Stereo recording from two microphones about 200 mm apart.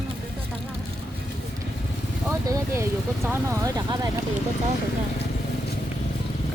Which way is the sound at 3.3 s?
15° right (ahead or behind).